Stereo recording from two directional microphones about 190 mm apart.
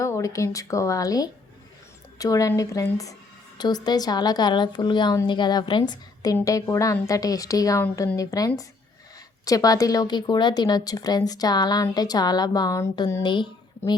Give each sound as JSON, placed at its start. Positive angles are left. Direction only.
{"t": 0.0, "sound": "a woman's voice", "side_deg": 15}
{"t": 13.2, "sound": "a woman's voice", "side_deg": 25}